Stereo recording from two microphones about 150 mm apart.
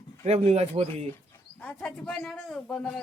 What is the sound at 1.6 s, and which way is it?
A man's voice, 5° left (ahead or behind).